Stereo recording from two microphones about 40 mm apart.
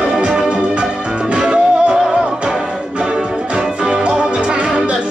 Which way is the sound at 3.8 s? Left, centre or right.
Right.